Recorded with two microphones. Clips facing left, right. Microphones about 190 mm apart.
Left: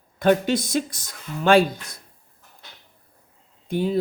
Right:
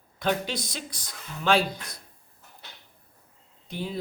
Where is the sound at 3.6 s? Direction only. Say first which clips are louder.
Left 11 dB; 50° left (ahead or behind).